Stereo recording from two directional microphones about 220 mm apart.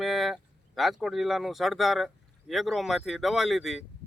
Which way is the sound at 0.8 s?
Centre (ahead or behind).